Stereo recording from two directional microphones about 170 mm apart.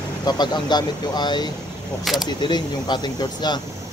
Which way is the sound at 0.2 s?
25° left (ahead or behind).